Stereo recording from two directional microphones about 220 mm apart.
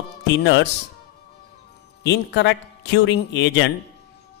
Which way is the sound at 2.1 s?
50° left (ahead or behind).